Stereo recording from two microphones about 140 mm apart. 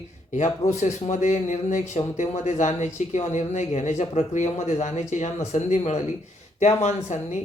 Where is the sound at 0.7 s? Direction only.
55° left (ahead or behind).